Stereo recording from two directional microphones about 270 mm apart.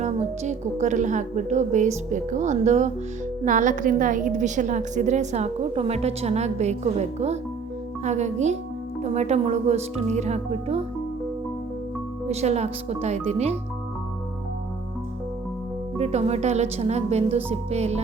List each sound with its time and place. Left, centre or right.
0.0 s a woman's voice: right
12.3 s a woman's voice: right
16.0 s a woman's voice: right